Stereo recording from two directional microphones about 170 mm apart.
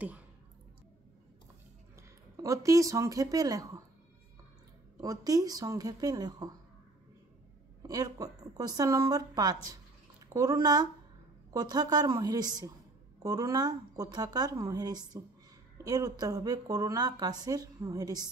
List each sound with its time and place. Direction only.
2.0 s speech: 20° right (ahead or behind)
5.0 s a woman's voice: 20° right (ahead or behind)
7.8 s a woman's voice: 20° right (ahead or behind)